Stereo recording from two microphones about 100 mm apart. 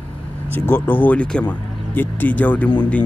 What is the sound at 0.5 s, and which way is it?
Speech, 20° left (ahead or behind).